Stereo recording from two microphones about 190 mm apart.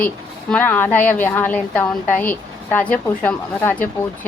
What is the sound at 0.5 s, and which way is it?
A woman's voice, 10° left (ahead or behind).